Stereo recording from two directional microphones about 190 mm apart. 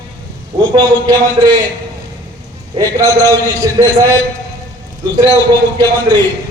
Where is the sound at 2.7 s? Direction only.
20° right (ahead or behind).